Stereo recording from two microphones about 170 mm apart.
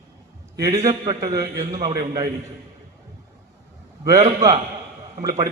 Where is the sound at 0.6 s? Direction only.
20° right (ahead or behind).